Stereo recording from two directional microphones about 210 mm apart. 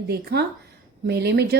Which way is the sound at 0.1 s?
50° right (ahead or behind).